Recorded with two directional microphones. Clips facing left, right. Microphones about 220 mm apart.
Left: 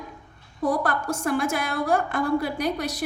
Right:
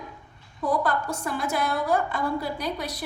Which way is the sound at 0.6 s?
90° left.